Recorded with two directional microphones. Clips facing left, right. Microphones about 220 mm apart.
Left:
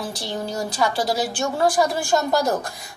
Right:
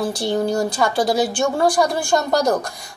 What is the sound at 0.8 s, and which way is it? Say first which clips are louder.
Speech: right 3 dB; 50° right (ahead or behind).